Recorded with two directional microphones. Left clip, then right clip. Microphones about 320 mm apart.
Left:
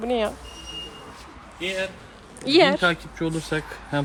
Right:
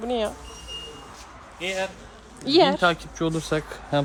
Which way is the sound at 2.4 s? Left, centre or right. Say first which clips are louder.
Left 1 dB; centre.